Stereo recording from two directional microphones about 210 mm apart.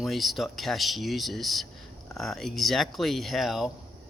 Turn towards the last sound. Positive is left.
turn(degrees=0)  # may be behind; listen again after turning